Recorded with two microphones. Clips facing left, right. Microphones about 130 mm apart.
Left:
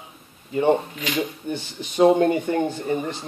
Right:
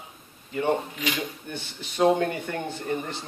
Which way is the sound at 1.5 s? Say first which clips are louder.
Left 8 dB; 20° left (ahead or behind).